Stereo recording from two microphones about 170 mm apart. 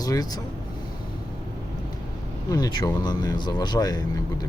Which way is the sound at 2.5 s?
25° left (ahead or behind).